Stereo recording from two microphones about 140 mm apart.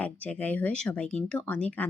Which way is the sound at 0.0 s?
10° left (ahead or behind).